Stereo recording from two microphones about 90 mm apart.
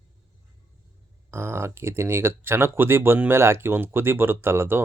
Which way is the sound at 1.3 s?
30° right (ahead or behind).